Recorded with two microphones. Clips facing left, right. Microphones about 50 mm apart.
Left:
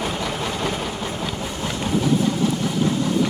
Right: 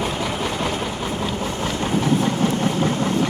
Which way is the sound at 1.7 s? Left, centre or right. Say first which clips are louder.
Even; right.